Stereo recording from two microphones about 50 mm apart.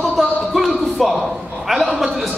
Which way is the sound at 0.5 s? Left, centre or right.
Centre.